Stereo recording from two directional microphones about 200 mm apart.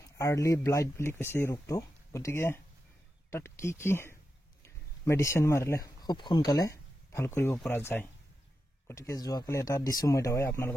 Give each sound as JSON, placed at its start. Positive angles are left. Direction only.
{"t": 0.0, "sound": "speech", "side_deg": 15}